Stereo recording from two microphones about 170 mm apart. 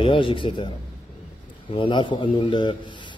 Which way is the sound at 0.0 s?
30° left (ahead or behind).